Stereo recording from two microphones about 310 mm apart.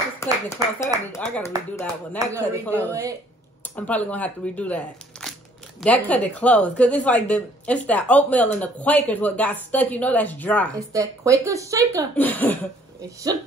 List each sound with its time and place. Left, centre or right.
0.2 s speech: centre
2.1 s speech: centre
2.6 s a woman's voice: centre
10.9 s speech: centre
12.2 s a woman's voice: centre